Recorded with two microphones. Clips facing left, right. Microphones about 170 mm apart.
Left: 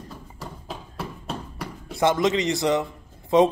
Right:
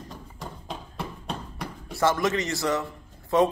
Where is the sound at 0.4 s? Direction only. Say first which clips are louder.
Even; 5° left (ahead or behind).